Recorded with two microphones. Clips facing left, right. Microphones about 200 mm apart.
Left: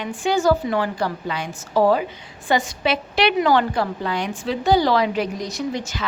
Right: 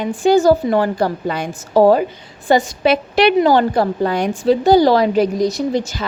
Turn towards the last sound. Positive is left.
turn(degrees=-35)  # may be behind; listen again after turning